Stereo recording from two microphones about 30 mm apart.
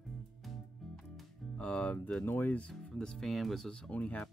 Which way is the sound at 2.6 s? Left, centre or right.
Left.